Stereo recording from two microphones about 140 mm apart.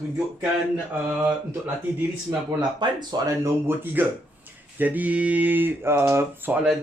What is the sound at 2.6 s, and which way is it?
Speech, 30° right (ahead or behind).